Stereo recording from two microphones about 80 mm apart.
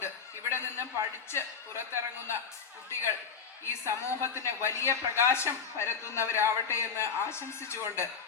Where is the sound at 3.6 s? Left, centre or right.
Left.